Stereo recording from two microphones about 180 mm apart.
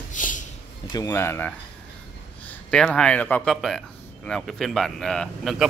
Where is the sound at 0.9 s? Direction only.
15° left (ahead or behind).